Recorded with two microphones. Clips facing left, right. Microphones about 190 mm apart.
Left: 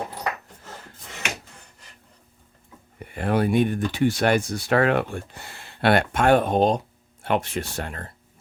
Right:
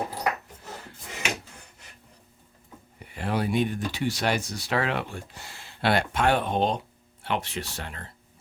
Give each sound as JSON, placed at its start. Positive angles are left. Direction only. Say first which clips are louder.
{"t": 3.0, "sound": "speech", "louder": "left 6 dB", "side_deg": 55}